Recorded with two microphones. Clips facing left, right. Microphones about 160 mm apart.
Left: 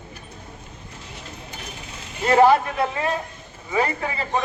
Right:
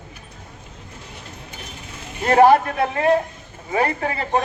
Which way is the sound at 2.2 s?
50° right (ahead or behind).